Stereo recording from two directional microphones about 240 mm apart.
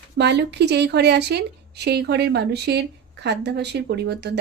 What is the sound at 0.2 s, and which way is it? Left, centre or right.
Speech, right.